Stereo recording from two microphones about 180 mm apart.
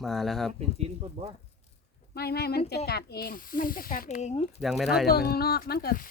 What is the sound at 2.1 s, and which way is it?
Speech, 60° left (ahead or behind).